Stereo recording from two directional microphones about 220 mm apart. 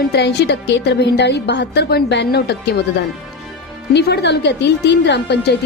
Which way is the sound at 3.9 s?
50° left (ahead or behind).